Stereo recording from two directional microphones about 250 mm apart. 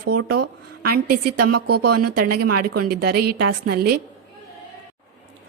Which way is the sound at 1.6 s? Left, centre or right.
Right.